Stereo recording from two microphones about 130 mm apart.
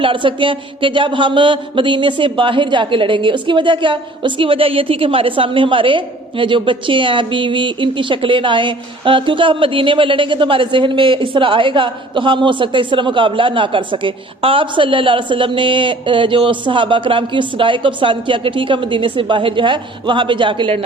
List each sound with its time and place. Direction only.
0.0 s a man's voice: 40° right (ahead or behind)